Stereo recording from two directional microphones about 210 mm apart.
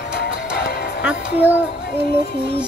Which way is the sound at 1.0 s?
10° right (ahead or behind).